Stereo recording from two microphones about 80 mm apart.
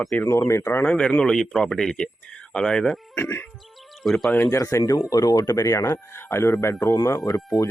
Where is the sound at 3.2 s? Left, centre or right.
Left.